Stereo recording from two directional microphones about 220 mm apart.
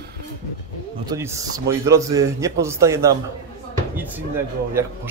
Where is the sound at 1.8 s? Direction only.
15° right (ahead or behind).